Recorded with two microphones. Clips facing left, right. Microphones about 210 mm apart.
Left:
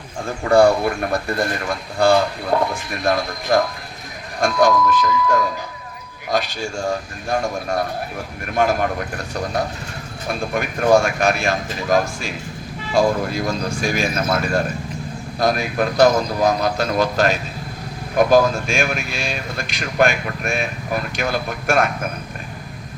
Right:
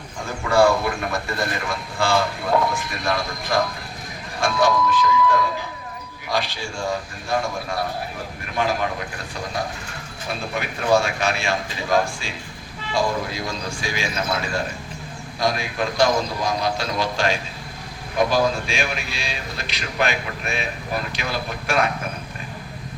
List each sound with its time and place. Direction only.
0.4 s speech: 50° left (ahead or behind)
15.4 s speech: 45° left (ahead or behind)